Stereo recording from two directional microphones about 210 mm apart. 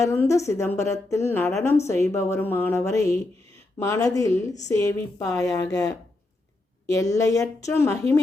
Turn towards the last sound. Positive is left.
turn(degrees=15)  # may be behind; listen again after turning